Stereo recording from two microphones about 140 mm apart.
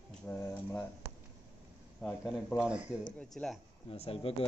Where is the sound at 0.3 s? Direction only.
15° left (ahead or behind).